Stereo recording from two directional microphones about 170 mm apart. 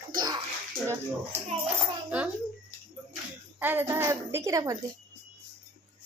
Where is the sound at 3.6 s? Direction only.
10° right (ahead or behind).